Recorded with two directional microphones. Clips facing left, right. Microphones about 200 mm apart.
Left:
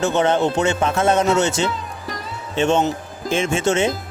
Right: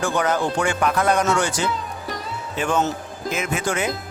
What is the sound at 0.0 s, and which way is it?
Speech, 25° left (ahead or behind).